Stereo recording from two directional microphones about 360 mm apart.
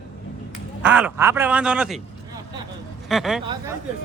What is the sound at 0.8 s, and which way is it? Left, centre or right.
A man's voice, centre.